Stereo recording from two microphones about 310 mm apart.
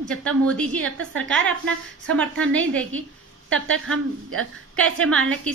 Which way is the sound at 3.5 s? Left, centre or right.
Right.